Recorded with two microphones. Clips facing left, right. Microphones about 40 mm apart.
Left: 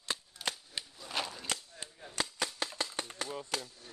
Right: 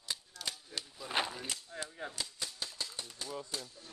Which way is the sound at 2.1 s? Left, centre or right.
Left.